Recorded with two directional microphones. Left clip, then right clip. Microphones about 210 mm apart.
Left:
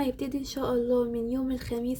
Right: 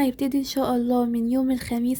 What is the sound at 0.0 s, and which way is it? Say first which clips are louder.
Speech: right 7 dB; 50° right (ahead or behind).